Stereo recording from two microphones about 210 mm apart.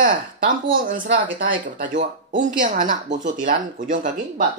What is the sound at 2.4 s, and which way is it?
Speech, 35° right (ahead or behind).